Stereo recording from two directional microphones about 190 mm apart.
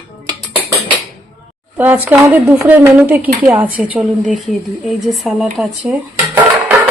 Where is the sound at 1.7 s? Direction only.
10° right (ahead or behind).